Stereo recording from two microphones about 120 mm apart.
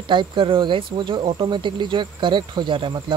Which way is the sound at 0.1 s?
45° right (ahead or behind).